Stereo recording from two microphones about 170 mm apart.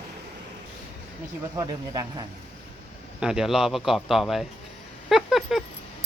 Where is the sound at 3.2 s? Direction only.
5° right (ahead or behind).